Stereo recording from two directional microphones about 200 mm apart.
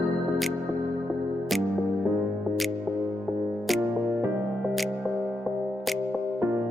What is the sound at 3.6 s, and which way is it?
Music, centre (ahead or behind).